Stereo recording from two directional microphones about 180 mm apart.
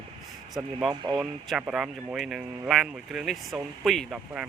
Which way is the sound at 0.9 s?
25° right (ahead or behind).